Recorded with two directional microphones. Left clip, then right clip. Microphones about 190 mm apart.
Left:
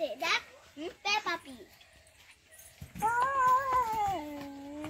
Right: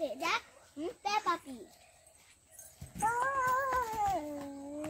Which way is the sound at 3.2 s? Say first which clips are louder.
Left 6 dB; 15° right (ahead or behind).